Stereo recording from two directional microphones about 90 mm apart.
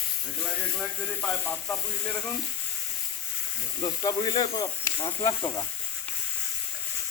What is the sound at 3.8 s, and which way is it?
Speech, 45° left (ahead or behind).